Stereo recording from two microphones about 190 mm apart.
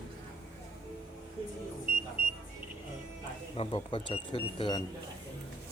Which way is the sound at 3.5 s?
30° left (ahead or behind).